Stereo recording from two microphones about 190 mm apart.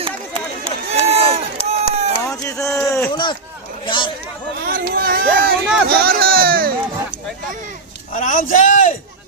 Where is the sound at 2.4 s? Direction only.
15° left (ahead or behind).